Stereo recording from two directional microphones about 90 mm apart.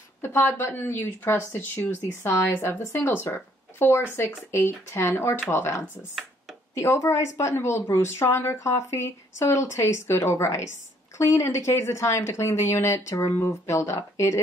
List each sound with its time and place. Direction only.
0.2 s a woman's voice: 25° left (ahead or behind)